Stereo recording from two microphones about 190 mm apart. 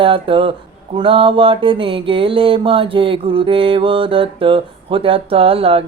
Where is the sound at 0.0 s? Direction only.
30° right (ahead or behind).